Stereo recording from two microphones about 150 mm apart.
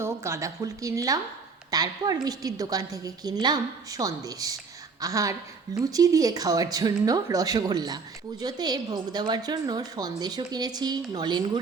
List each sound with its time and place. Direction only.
0.0 s a woman's voice: 20° right (ahead or behind)